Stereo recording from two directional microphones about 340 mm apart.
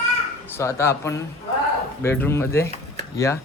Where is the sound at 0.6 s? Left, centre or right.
Centre.